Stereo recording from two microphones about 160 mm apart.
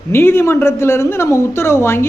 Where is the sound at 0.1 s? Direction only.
15° left (ahead or behind).